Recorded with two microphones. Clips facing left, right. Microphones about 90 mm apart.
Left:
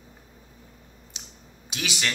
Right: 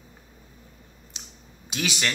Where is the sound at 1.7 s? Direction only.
20° left (ahead or behind).